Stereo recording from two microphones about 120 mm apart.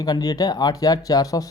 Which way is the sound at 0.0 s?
30° left (ahead or behind).